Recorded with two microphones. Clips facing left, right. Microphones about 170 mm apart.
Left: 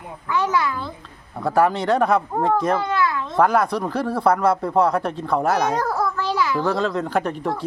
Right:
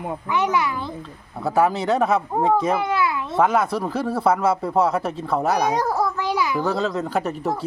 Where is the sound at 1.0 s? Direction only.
Centre (ahead or behind).